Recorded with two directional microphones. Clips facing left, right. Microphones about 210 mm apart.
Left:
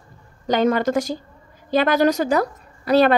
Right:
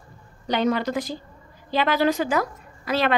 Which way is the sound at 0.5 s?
45° left (ahead or behind).